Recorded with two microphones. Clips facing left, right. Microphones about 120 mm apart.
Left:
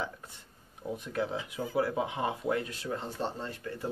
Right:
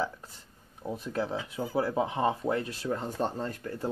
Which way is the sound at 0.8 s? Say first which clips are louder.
Right 1 dB; 30° right (ahead or behind).